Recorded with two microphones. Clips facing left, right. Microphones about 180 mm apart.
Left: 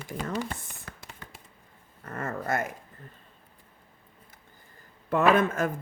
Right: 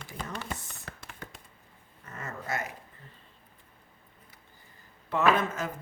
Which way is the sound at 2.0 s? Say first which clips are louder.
Left 7 dB; 55° left (ahead or behind).